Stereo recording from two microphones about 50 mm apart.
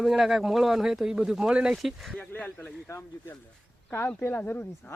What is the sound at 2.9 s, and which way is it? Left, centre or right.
Speech, left.